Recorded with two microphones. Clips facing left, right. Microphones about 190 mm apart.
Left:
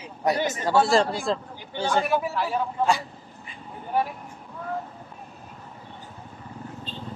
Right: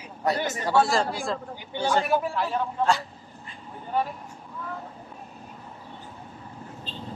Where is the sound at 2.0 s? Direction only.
5° left (ahead or behind).